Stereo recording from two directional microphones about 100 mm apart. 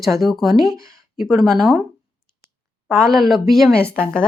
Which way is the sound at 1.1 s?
Centre (ahead or behind).